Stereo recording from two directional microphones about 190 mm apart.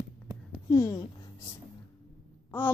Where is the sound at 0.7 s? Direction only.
15° left (ahead or behind).